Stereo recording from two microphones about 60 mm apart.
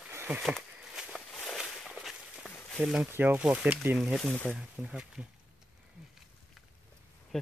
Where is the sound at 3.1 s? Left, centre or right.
Right.